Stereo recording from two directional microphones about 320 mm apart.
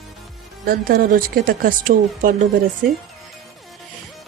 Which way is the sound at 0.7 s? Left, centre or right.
Right.